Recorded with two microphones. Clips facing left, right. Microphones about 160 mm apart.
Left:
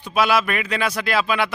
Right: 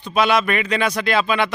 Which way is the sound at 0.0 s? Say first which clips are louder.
Right 1 dB; 5° left (ahead or behind).